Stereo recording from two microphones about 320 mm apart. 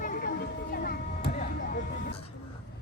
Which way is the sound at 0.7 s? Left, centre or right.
Left.